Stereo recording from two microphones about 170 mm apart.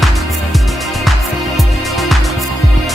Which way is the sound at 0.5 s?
Centre (ahead or behind).